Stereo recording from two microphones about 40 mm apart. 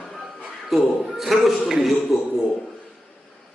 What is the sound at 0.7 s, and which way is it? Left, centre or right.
A man's voice, centre.